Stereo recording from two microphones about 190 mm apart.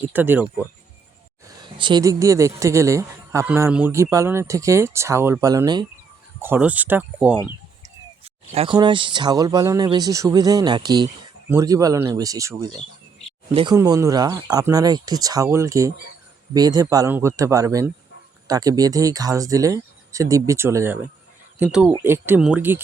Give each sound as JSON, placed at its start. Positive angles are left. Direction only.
{"t": 0.1, "sound": "speech", "side_deg": -10}
{"t": 1.5, "sound": "speech", "side_deg": -25}
{"t": 7.8, "sound": "speech", "side_deg": -30}
{"t": 13.7, "sound": "speech", "side_deg": -20}